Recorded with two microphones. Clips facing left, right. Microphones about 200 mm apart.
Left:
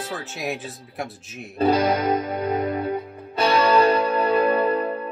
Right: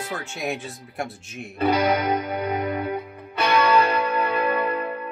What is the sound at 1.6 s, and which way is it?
Music, 30° left (ahead or behind).